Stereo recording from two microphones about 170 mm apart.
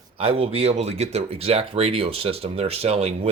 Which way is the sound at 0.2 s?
35° right (ahead or behind).